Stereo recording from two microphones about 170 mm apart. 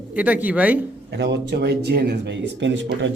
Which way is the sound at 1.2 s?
90° right.